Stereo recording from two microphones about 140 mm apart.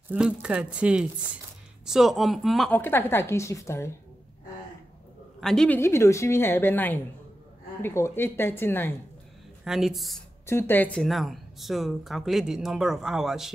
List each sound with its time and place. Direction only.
0.1 s speech: 10° right (ahead or behind)
2.7 s a woman's voice: 15° left (ahead or behind)
5.4 s speech: 5° left (ahead or behind)
5.8 s a woman's voice: 20° left (ahead or behind)
9.7 s speech: 5° right (ahead or behind)
10.4 s speech: 15° left (ahead or behind); by 13.5 s 5° right (ahead or behind)